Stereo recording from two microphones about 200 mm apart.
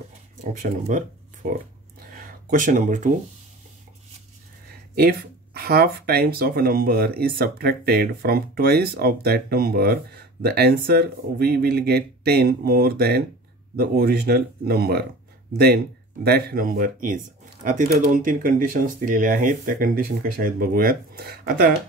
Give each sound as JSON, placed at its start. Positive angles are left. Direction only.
{"t": 0.4, "sound": "speech", "side_deg": -40}
{"t": 2.0, "sound": "a sound", "side_deg": -50}
{"t": 4.9, "sound": "speech", "side_deg": -50}